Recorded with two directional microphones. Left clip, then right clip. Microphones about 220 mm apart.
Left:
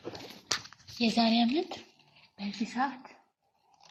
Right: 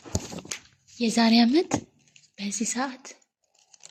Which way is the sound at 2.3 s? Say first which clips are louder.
Right 6 dB; 55° right (ahead or behind).